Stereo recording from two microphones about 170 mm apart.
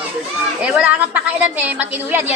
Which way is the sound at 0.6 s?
5° right (ahead or behind).